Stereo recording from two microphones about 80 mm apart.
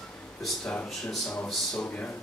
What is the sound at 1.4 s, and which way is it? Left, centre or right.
Speech, centre.